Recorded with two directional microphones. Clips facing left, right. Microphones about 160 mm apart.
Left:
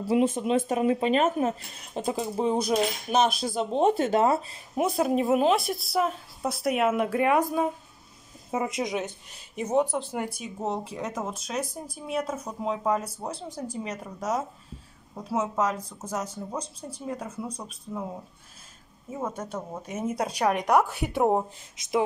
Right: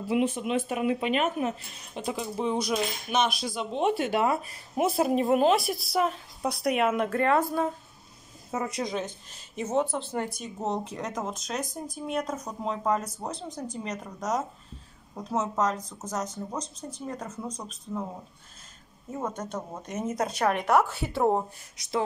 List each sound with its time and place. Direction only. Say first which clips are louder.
0.1 s speech: left 3 dB; 35° left (ahead or behind)
4.7 s a woman's voice: even; centre (ahead or behind)
19.0 s speech: even; 5° left (ahead or behind)